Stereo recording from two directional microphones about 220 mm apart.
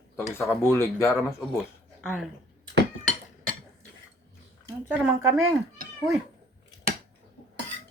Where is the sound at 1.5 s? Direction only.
Centre (ahead or behind).